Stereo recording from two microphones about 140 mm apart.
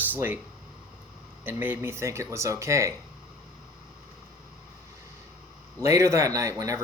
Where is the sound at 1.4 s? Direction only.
15° right (ahead or behind).